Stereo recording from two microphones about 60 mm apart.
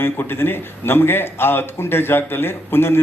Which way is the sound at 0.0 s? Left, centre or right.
Left.